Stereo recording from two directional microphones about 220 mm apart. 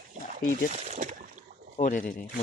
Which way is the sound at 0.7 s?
30° right (ahead or behind).